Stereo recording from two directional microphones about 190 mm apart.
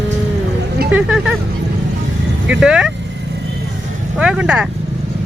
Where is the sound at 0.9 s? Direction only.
5° right (ahead or behind).